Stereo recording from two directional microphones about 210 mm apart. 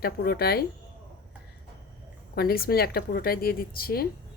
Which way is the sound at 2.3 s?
45° left (ahead or behind).